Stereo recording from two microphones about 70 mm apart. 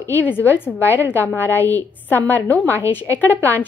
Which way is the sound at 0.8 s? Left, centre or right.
Right.